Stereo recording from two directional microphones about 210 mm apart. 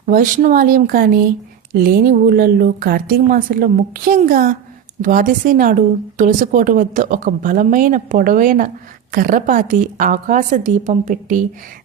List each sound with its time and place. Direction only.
0.0 s a woman's voice: 40° right (ahead or behind)